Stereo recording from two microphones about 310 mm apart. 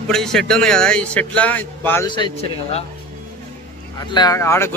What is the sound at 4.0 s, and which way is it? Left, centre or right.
Speech, centre.